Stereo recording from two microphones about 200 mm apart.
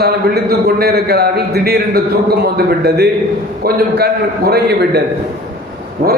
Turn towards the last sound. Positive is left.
turn(degrees=-45)  # may be behind; listen again after turning